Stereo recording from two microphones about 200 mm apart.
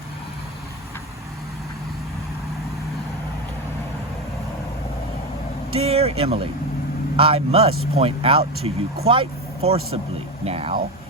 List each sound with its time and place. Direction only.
5.7 s speech: 30° right (ahead or behind)